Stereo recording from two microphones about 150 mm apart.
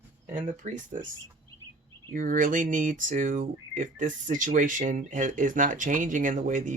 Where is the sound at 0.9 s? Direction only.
60° right (ahead or behind).